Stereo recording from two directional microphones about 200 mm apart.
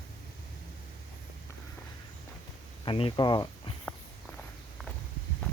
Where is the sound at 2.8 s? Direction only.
25° left (ahead or behind).